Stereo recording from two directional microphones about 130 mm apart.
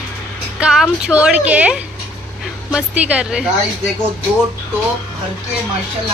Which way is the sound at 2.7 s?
10° right (ahead or behind).